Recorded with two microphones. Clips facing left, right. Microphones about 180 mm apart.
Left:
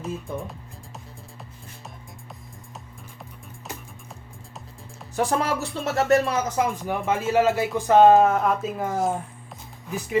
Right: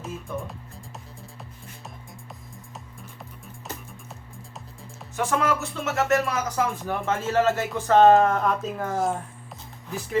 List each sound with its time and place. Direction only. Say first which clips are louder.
0.0 s speech: left 2 dB; centre (ahead or behind)
5.1 s music: left 1 dB; 35° left (ahead or behind)
6.6 s speech: left 2 dB; 15° left (ahead or behind); by 9.1 s centre (ahead or behind)